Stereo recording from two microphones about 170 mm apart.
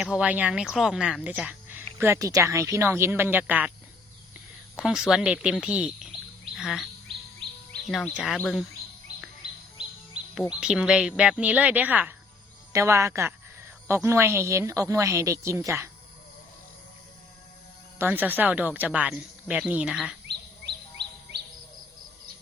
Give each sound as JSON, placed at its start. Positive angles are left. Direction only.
{"t": 0.0, "sound": "speech", "side_deg": -5}
{"t": 4.8, "sound": "speech", "side_deg": 0}
{"t": 6.6, "sound": "bird vocalization", "side_deg": 0}
{"t": 7.7, "sound": "speech", "side_deg": 5}
{"t": 10.6, "sound": "speech", "side_deg": -5}
{"t": 17.9, "sound": "speech", "side_deg": -10}